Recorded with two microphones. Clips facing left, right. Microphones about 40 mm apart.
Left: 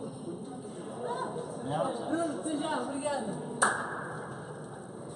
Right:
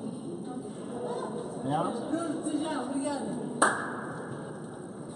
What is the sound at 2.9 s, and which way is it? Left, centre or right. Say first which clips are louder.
Speech: right 1 dB; left.